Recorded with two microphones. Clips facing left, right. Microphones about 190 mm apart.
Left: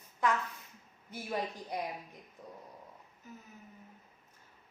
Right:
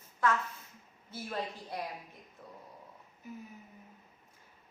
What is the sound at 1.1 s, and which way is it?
Speech, 15° left (ahead or behind).